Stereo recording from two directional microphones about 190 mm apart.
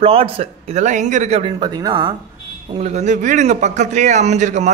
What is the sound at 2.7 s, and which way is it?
A man's voice, 35° right (ahead or behind).